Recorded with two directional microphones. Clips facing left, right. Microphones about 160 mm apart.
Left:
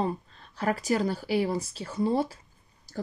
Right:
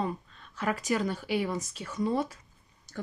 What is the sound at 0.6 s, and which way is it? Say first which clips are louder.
Speech: left 3 dB; 35° left (ahead or behind).